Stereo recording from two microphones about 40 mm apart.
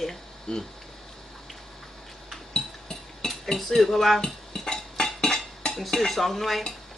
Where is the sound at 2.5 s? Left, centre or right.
Centre.